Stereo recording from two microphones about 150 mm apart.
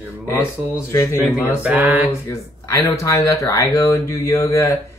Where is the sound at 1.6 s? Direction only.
10° right (ahead or behind).